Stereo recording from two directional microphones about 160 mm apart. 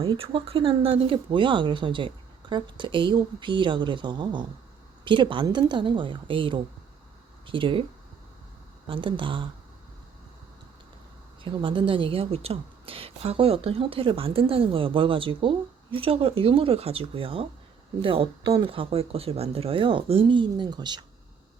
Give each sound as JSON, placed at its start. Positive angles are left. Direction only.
{"t": 0.0, "sound": "a woman's voice", "side_deg": -35}
{"t": 8.9, "sound": "a woman's voice", "side_deg": -30}
{"t": 11.4, "sound": "a woman's voice", "side_deg": -30}
{"t": 18.4, "sound": "speech", "side_deg": -20}
{"t": 18.7, "sound": "a woman's voice", "side_deg": -35}